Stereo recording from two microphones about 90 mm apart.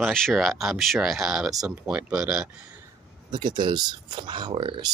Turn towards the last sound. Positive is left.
turn(degrees=-60)  # may be behind; listen again after turning